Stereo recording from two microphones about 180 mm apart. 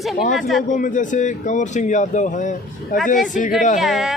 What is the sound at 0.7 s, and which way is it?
Speech, 45° left (ahead or behind).